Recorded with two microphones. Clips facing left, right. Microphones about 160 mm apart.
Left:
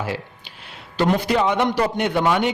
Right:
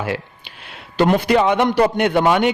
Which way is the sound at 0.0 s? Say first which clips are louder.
Right 3 dB; 65° right (ahead or behind).